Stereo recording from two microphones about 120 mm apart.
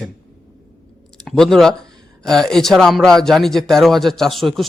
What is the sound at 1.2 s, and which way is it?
Speech, 5° left (ahead or behind).